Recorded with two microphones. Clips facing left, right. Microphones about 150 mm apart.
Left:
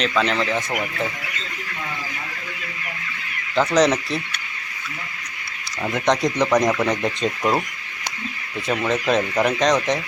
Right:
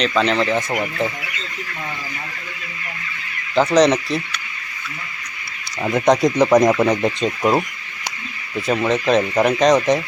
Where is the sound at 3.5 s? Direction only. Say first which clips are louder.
Right 4 dB; 30° right (ahead or behind).